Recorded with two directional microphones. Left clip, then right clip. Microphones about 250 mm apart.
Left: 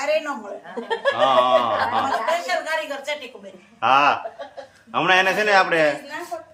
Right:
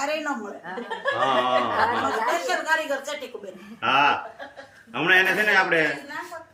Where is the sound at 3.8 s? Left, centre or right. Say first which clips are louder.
Left 3 dB; centre.